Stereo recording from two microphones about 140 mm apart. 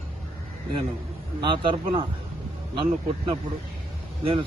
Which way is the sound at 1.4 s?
35° right (ahead or behind).